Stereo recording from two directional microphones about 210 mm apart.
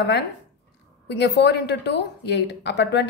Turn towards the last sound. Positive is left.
turn(degrees=55)  # may be behind; listen again after turning